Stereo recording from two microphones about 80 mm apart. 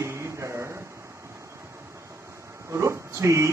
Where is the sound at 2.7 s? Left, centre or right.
Right.